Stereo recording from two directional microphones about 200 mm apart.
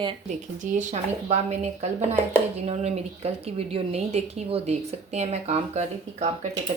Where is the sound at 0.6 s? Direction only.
40° right (ahead or behind).